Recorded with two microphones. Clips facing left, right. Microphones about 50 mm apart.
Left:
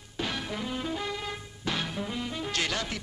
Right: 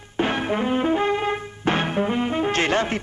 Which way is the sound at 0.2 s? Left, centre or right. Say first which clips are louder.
Right 11 dB; right.